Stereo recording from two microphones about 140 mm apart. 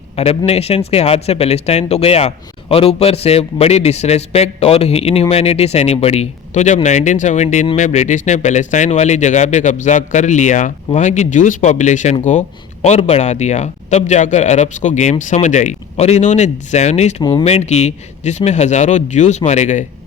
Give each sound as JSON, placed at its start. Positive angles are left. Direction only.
{"t": 0.2, "sound": "a man's voice", "side_deg": 45}